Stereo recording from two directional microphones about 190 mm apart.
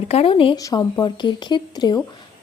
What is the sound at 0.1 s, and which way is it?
A woman's voice, 30° left (ahead or behind).